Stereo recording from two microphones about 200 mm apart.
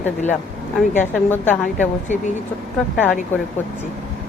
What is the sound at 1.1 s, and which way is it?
Speech, 10° left (ahead or behind).